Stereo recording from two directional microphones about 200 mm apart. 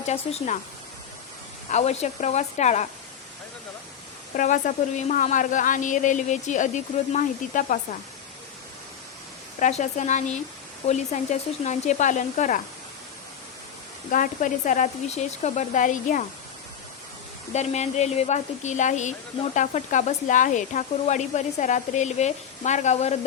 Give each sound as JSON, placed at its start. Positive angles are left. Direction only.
{"t": 0.0, "sound": "speech", "side_deg": 35}
{"t": 1.7, "sound": "speech", "side_deg": 35}
{"t": 4.4, "sound": "speech", "side_deg": 40}
{"t": 9.6, "sound": "speech", "side_deg": 35}
{"t": 14.1, "sound": "speech", "side_deg": 40}
{"t": 17.5, "sound": "speech", "side_deg": 35}